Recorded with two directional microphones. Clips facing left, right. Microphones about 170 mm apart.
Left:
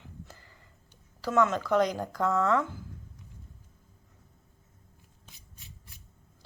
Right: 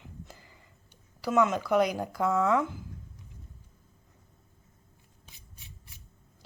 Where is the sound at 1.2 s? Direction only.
15° right (ahead or behind).